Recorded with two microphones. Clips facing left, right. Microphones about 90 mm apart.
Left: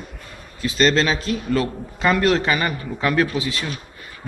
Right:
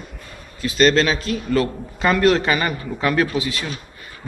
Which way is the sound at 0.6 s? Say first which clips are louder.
Right 2 dB; 25° left (ahead or behind).